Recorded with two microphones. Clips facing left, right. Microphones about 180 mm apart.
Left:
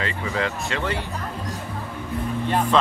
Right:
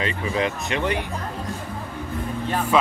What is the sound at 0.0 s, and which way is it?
Speech, 20° right (ahead or behind).